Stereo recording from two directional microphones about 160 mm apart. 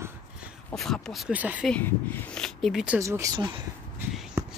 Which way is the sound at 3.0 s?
20° right (ahead or behind).